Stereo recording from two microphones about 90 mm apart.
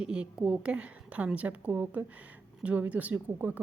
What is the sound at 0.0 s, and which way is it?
A woman's voice, 10° right (ahead or behind).